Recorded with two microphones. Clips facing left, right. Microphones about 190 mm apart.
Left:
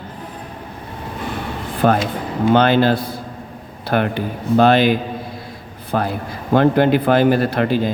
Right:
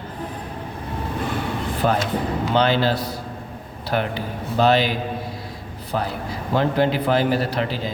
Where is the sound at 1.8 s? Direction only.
55° left (ahead or behind).